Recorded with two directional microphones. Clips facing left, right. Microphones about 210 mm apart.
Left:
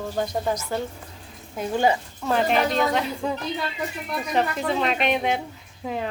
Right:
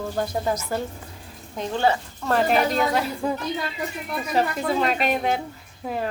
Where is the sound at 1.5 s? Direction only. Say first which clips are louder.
Left 1 dB; 10° left (ahead or behind).